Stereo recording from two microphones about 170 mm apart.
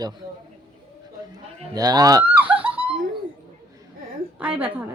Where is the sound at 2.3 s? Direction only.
10° right (ahead or behind).